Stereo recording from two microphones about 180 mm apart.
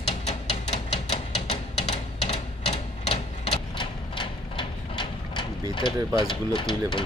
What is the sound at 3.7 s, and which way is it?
Mechanisms, 25° left (ahead or behind).